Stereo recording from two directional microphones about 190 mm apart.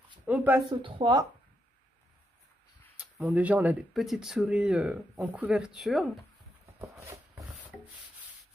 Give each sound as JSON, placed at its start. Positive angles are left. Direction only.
{"t": 0.3, "sound": "speech", "side_deg": -10}
{"t": 0.7, "sound": "speech", "side_deg": -25}
{"t": 3.0, "sound": "speech", "side_deg": -5}
{"t": 6.8, "sound": "a sound", "side_deg": -15}